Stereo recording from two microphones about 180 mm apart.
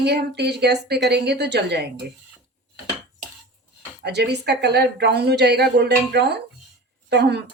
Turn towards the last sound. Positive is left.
turn(degrees=-70)  # may be behind; listen again after turning